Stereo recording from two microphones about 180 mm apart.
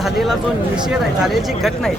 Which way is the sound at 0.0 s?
Centre (ahead or behind).